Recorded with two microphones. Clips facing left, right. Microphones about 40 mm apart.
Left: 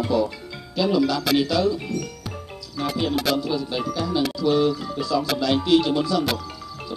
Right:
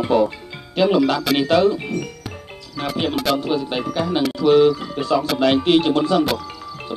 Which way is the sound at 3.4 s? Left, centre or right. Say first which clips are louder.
Right 3 dB; right.